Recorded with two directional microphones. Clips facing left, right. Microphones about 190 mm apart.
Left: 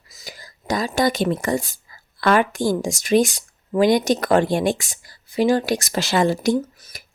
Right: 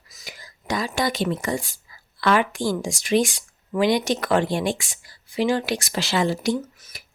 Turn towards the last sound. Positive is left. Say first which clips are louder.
# left 4 dB
turn(degrees=45)  # may be behind; listen again after turning